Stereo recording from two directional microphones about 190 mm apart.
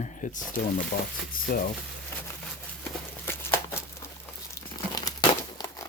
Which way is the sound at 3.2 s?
10° left (ahead or behind).